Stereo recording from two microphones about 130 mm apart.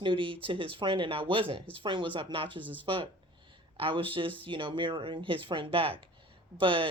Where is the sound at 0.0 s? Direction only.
40° right (ahead or behind).